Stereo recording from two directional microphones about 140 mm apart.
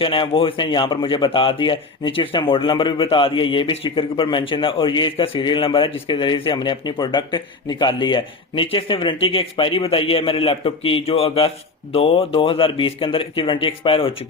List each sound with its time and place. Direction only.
0.0 s speech: 40° left (ahead or behind)